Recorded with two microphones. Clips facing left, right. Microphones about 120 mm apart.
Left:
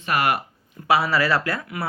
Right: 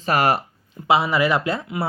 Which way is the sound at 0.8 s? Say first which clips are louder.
Right 2 dB; 20° right (ahead or behind).